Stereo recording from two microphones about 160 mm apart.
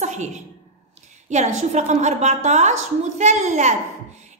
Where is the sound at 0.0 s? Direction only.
50° right (ahead or behind).